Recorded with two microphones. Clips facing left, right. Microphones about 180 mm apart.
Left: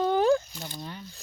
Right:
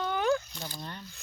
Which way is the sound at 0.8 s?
5° left (ahead or behind).